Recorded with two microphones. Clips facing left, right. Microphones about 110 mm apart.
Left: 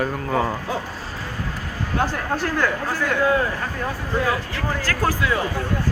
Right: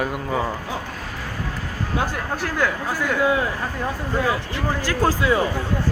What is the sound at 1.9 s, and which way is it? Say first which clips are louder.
Speech: left 3 dB; 5° right (ahead or behind).